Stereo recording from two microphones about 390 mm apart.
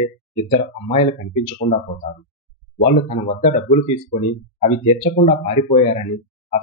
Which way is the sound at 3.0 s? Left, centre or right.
Centre.